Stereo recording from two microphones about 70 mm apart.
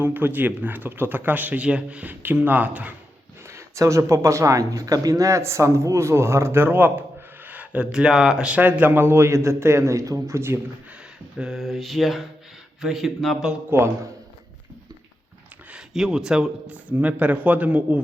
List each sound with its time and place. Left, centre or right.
0.0 s speech: right
2.2 s speech: right
3.4 s speech: right
11.3 s mantra: centre
13.7 s a man's voice: right
15.9 s speech: centre
16.7 s speech: right